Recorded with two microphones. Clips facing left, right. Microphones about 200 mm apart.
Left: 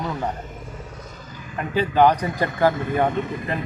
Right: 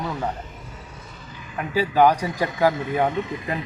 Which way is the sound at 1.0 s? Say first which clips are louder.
Left 2 dB; 40° left (ahead or behind).